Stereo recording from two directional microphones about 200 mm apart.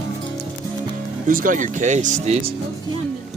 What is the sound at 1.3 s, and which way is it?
Speech, 40° right (ahead or behind).